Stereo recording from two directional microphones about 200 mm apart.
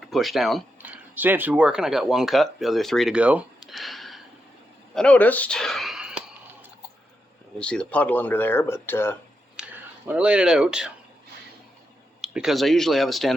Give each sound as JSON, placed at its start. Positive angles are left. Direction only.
{"t": 0.1, "sound": "speech", "side_deg": 0}
{"t": 4.9, "sound": "a sound", "side_deg": 5}
{"t": 7.6, "sound": "speech", "side_deg": 5}
{"t": 9.6, "sound": "a sound", "side_deg": -5}
{"t": 10.1, "sound": "speech", "side_deg": -5}
{"t": 12.2, "sound": "speech", "side_deg": 0}